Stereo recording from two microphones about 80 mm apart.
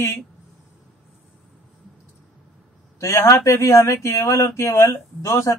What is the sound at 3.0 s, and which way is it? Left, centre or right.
Speech, left.